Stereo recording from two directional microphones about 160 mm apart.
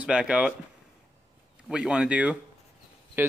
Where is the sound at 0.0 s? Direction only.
5° right (ahead or behind).